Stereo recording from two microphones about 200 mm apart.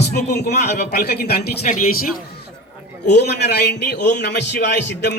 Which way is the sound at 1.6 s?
40° left (ahead or behind).